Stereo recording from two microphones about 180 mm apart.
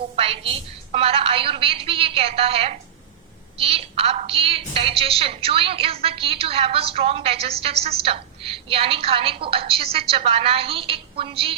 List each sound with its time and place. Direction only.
0.2 s a woman's voice: 30° right (ahead or behind)